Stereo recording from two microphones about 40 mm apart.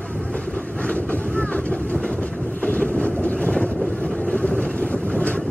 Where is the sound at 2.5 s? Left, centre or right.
Left.